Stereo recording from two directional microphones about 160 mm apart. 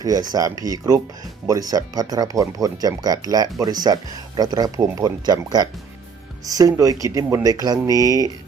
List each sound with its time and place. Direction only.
0.0 s speech: 25° right (ahead or behind)